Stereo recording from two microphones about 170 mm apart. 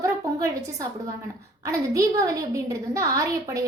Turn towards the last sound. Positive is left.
turn(degrees=-20)  # may be behind; listen again after turning